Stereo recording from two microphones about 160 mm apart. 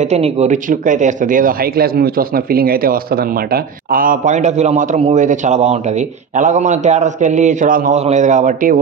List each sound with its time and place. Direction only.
0.0 s a man's voice: 45° right (ahead or behind)